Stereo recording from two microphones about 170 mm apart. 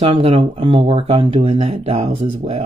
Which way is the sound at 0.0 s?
35° right (ahead or behind).